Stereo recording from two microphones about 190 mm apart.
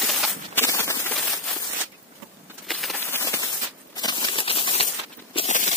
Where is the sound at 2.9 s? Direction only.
10° left (ahead or behind); by 4.9 s 30° left (ahead or behind).